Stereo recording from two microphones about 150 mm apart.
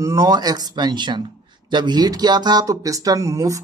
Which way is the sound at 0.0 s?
25° right (ahead or behind).